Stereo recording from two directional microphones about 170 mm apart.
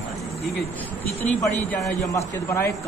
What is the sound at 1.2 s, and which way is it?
A man's voice, 10° left (ahead or behind).